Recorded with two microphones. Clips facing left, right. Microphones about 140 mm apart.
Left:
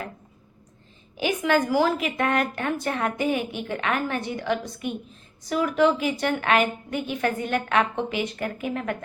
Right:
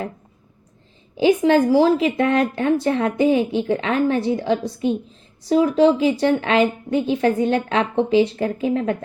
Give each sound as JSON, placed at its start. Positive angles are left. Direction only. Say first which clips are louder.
{"t": 1.1, "sound": "a woman's voice", "louder": "right 8 dB", "side_deg": -30}